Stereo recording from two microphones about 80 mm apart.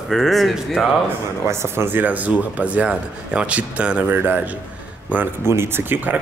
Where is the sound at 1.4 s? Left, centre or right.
Right.